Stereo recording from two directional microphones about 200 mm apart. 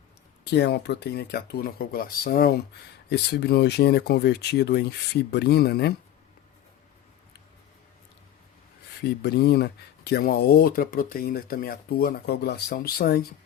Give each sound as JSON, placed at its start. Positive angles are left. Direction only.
{"t": 0.4, "sound": "speech", "side_deg": 55}
{"t": 9.0, "sound": "speech", "side_deg": 55}